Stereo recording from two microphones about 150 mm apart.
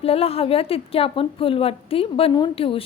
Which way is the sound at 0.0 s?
40° left (ahead or behind).